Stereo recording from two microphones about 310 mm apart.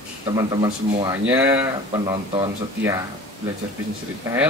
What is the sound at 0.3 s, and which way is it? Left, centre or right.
Speech, centre.